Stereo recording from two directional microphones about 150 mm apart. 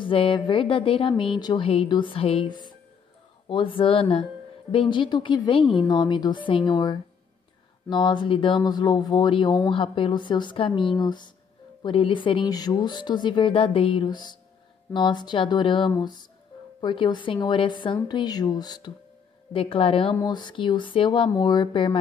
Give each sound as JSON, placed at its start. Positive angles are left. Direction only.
{"t": 0.0, "sound": "speech", "side_deg": 35}
{"t": 19.5, "sound": "speech", "side_deg": 35}